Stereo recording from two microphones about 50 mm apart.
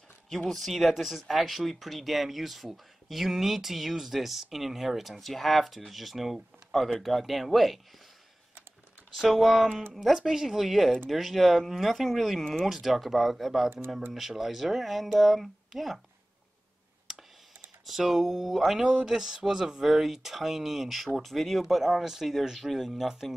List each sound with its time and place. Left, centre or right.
0.5 s speech: centre
9.1 s speech: centre
13.7 s speech: right
14.1 s speech: centre
17.1 s computer keyboard: centre
17.8 s speech: centre